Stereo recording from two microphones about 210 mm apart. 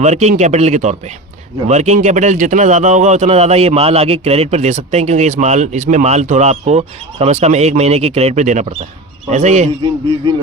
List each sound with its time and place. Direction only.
0.0 s a man's voice: 35° right (ahead or behind)